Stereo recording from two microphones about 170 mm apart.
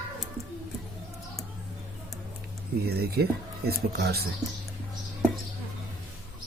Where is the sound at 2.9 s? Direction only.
65° right (ahead or behind).